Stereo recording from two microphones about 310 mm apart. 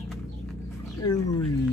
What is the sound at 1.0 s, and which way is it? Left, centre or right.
Speech, centre.